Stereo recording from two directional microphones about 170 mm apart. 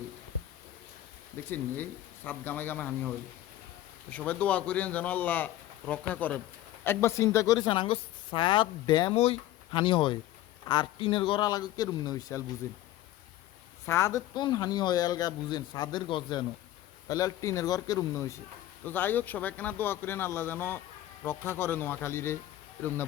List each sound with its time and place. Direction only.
1.5 s a man's voice: 10° left (ahead or behind)
4.1 s a man's voice: 10° left (ahead or behind)
13.8 s a man's voice: 15° left (ahead or behind)